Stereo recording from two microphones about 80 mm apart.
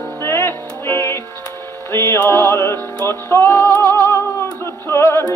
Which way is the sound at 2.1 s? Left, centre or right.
Left.